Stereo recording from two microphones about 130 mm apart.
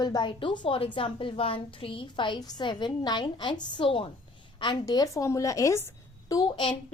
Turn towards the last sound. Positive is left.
turn(degrees=35)  # may be behind; listen again after turning